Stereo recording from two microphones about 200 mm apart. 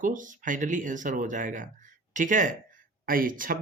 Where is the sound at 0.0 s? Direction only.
40° right (ahead or behind).